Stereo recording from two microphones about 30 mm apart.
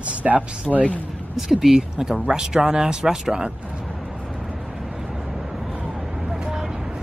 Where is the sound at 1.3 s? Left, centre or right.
Centre.